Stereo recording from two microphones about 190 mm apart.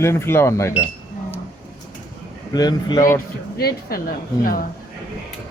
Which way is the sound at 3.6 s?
50° left (ahead or behind).